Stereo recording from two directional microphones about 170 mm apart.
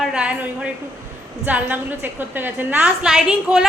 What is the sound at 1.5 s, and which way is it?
A woman's voice, 10° right (ahead or behind).